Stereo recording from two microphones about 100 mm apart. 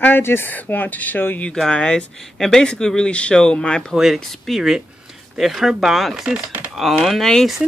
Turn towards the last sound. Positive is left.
turn(degrees=0)  # may be behind; listen again after turning